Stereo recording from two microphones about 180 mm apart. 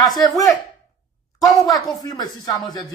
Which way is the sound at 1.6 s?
20° left (ahead or behind).